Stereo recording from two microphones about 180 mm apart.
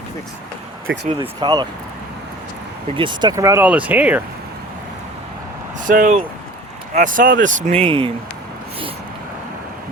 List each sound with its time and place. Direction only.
0.9 s speech: 85° right
1.2 s speech: 25° right (ahead or behind)
2.9 s speech: 25° right (ahead or behind); by 4.2 s 10° right (ahead or behind)
5.8 s speech: 50° right (ahead or behind)
7.4 s speech: 35° right (ahead or behind)